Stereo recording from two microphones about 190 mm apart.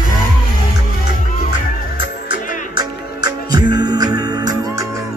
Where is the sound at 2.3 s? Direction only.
20° right (ahead or behind).